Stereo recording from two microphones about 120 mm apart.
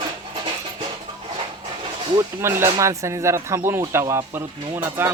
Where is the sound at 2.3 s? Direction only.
20° right (ahead or behind).